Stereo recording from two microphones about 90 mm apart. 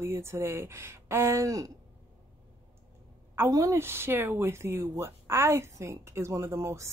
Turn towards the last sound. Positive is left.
turn(degrees=-35)  # may be behind; listen again after turning